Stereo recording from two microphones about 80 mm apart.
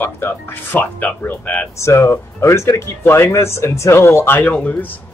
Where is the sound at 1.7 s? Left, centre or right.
Left; by 4.9 s centre.